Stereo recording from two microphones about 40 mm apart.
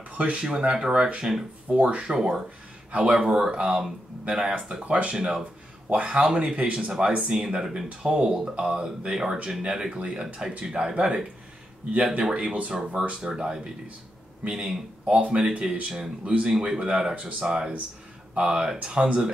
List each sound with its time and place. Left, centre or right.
0.1 s a sound: right
0.4 s speech: right
4.8 s speech: right
5.1 s speech: centre
5.9 s speech: right
7.2 s speech: right
11.9 s speech: right
12.3 s speech: right